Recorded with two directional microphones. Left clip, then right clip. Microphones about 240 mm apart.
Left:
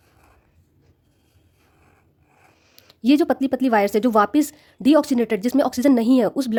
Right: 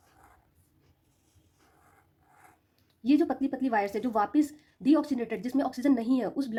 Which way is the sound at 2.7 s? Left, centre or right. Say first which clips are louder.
Left 8 dB; left.